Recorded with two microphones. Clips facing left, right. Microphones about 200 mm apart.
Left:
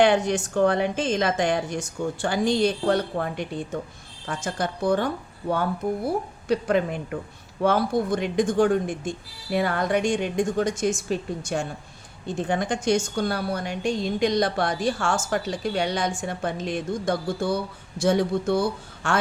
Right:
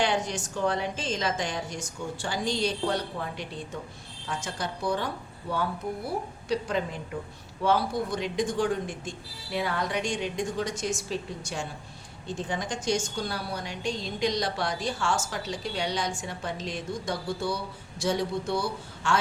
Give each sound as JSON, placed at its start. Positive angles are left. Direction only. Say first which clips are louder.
{"t": 0.0, "sound": "a woman's voice", "louder": "left 8 dB", "side_deg": 60}